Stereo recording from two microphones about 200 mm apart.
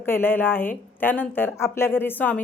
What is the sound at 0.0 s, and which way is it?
Speech, 10° left (ahead or behind).